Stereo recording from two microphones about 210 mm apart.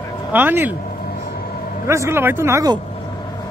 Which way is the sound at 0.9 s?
45° left (ahead or behind).